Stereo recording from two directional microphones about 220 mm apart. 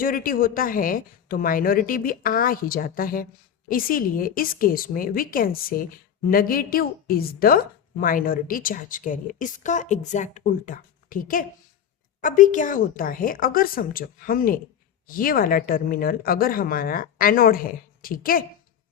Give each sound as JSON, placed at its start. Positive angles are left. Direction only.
{"t": 0.0, "sound": "a woman's voice", "side_deg": 40}